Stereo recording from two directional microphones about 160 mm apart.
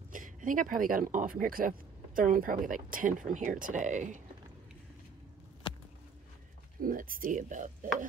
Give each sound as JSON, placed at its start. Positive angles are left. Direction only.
{"t": 0.1, "sound": "speech", "side_deg": -55}
{"t": 5.6, "sound": "a sound", "side_deg": 30}
{"t": 6.8, "sound": "speech", "side_deg": -60}